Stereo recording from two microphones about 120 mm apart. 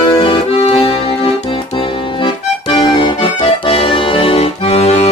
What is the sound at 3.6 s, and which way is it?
Accordion, 50° left (ahead or behind).